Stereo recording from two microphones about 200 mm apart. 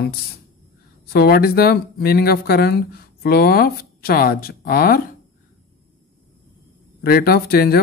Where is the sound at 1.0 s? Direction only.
50° left (ahead or behind).